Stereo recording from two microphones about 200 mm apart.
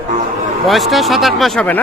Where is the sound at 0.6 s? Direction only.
Centre (ahead or behind).